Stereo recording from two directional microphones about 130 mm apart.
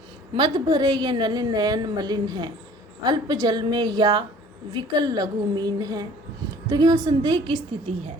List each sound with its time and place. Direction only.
0.3 s a woman's voice: 35° right (ahead or behind)